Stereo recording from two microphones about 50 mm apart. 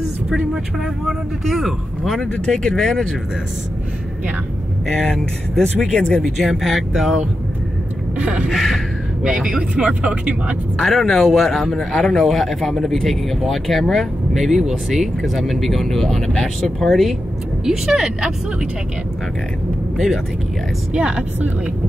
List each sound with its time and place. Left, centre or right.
1.0 s speech: centre
2.4 s speech: centre
5.1 s speech: centre
6.2 s speech: centre
8.2 s speech: right
8.5 s speech: centre
9.2 s speech: centre
10.8 s speech: centre
17.6 s speech: centre
20.9 s speech: right